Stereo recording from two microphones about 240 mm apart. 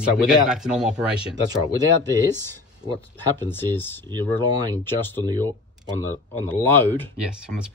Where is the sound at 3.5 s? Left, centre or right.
Centre.